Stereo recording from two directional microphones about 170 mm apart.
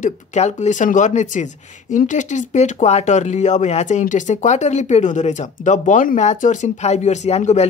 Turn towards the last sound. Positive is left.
turn(degrees=40)  # may be behind; listen again after turning